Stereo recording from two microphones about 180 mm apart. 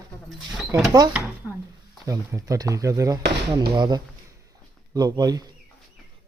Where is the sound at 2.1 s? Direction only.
20° right (ahead or behind).